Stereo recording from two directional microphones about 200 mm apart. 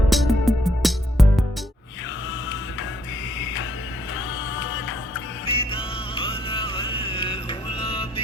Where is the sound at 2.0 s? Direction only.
70° left (ahead or behind).